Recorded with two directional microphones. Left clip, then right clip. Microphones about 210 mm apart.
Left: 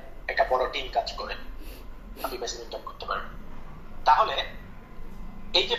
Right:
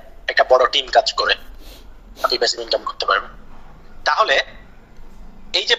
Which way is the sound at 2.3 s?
45° right (ahead or behind).